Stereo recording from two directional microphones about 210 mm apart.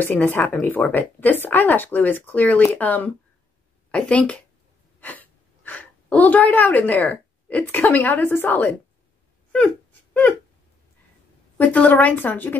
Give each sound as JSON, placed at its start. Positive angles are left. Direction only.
{"t": 0.0, "sound": "a woman's voice", "side_deg": 10}
{"t": 11.5, "sound": "a woman's voice", "side_deg": 10}